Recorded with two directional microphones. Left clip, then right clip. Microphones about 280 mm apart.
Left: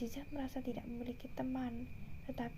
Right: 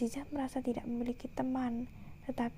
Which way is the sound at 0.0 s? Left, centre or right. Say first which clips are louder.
Right 7 dB; right.